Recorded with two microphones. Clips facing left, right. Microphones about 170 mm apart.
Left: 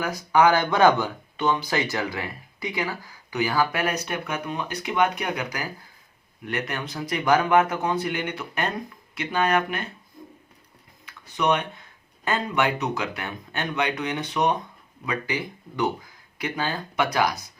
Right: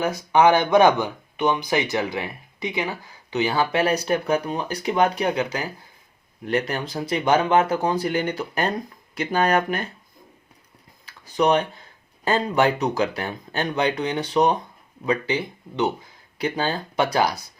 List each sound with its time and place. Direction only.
0.0 s speech: 20° right (ahead or behind); by 9.8 s 40° right (ahead or behind)
11.0 s speech: 35° right (ahead or behind)